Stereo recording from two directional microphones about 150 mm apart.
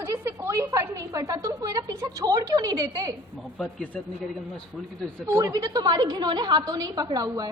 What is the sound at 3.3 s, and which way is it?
Speech, 5° left (ahead or behind).